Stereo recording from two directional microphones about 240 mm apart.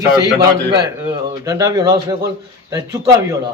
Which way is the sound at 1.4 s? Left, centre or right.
Centre.